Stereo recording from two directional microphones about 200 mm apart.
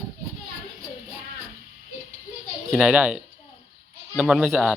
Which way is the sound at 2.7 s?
5° right (ahead or behind).